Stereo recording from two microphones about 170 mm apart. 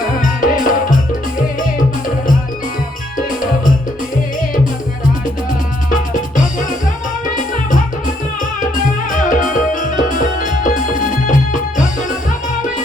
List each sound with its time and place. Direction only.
0.2 s music: 50° left (ahead or behind)
7.3 s music: 50° left (ahead or behind)